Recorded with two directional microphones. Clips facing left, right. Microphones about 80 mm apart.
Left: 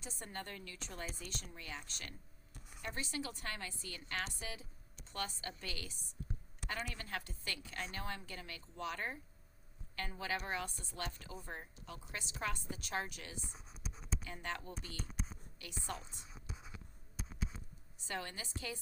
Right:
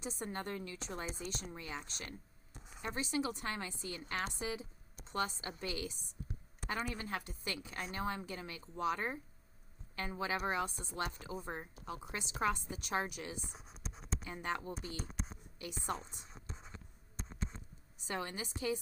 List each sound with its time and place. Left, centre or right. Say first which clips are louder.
0.0 s speech: right 6 dB; centre
13.6 s a sound: right 2 dB; centre
14.3 s speech: right 6 dB; centre
14.8 s speech: right 4 dB; right
15.1 s a sound: right 1 dB; centre
15.5 s a woman's voice: right 5 dB; centre
16.3 s writing: even; centre
17.9 s a woman's voice: right 3 dB; centre